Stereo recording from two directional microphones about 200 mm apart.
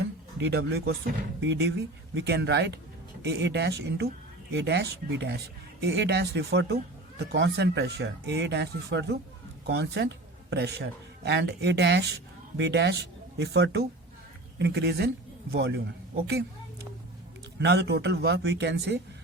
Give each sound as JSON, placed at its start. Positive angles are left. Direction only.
{"t": 0.3, "sound": "speech", "side_deg": -55}
{"t": 17.6, "sound": "speech", "side_deg": -60}